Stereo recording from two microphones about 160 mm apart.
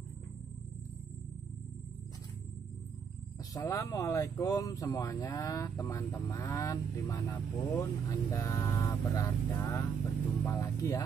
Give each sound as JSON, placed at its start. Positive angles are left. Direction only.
{"t": 3.5, "sound": "speech", "side_deg": 20}